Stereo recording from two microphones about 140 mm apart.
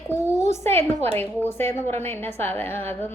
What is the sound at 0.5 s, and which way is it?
A woman's voice, 15° left (ahead or behind).